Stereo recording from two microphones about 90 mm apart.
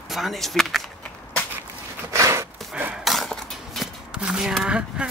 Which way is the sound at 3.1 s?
5° left (ahead or behind).